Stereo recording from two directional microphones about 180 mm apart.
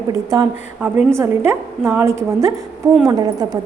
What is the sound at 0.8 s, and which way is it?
A woman's voice, 10° right (ahead or behind).